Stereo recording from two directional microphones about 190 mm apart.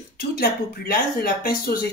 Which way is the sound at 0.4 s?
50° left (ahead or behind).